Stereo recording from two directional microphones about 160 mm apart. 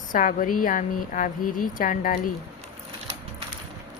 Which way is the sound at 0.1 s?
60° left (ahead or behind).